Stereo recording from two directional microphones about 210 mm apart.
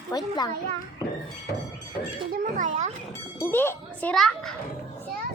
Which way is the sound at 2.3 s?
35° right (ahead or behind).